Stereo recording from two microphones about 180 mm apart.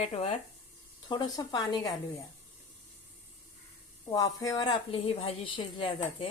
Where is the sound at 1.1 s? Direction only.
25° left (ahead or behind).